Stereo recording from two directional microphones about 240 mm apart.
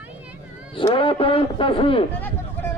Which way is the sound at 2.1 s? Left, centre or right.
Centre.